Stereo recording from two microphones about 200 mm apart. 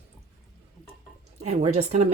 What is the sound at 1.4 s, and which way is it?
Speech, 35° right (ahead or behind).